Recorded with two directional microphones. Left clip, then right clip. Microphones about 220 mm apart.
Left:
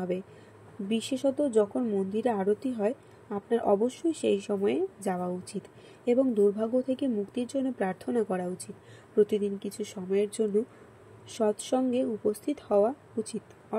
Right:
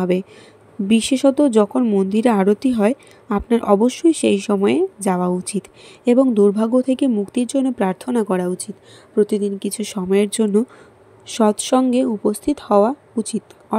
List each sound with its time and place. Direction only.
0.8 s speech: 45° right (ahead or behind)